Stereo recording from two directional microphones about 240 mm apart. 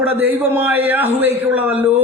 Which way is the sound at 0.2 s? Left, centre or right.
Centre.